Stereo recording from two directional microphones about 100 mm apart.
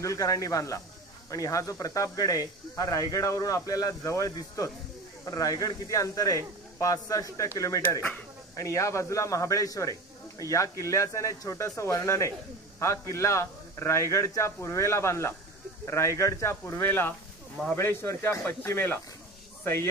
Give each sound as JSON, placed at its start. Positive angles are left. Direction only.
{"t": 0.0, "sound": "speech", "side_deg": 35}